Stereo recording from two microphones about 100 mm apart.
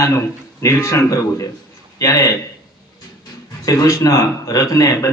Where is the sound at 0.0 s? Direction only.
30° left (ahead or behind).